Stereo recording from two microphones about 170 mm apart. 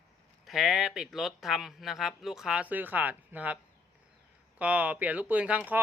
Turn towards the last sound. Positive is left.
turn(degrees=-10)  # may be behind; listen again after turning